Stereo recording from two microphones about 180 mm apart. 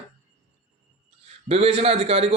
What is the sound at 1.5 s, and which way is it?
Speech, 30° right (ahead or behind).